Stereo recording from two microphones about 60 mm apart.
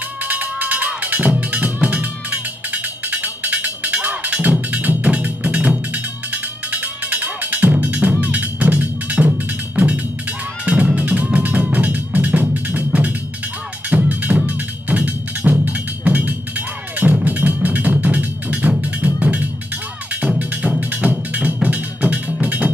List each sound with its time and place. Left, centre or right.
0.2 s music: right
8.2 s percussion: right
9.8 s music: right